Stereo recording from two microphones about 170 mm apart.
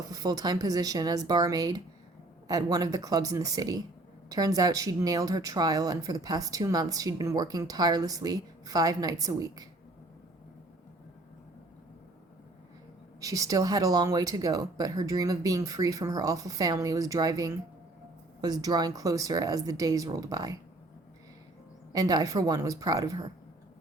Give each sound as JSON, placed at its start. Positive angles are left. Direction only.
{"t": 0.1, "sound": "speech", "side_deg": -20}
{"t": 13.1, "sound": "speech", "side_deg": -20}
{"t": 21.9, "sound": "speech", "side_deg": -20}